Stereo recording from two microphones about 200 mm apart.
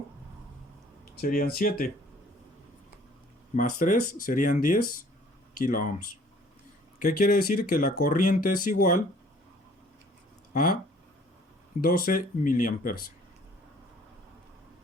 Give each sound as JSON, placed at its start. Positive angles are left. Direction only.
{"t": 1.1, "sound": "speech", "side_deg": 45}
{"t": 3.5, "sound": "speech", "side_deg": 40}
{"t": 7.0, "sound": "speech", "side_deg": 45}
{"t": 10.5, "sound": "speech", "side_deg": 45}
{"t": 11.8, "sound": "speech", "side_deg": 45}